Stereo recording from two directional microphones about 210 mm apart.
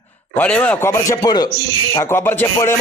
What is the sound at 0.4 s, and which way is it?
A man's voice, 5° left (ahead or behind).